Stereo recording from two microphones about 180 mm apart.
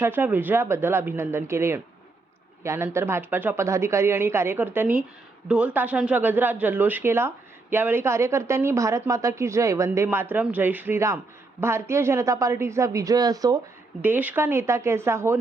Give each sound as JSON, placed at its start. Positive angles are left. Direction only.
{"t": 0.0, "sound": "speech", "side_deg": -10}
{"t": 14.0, "sound": "speech", "side_deg": -10}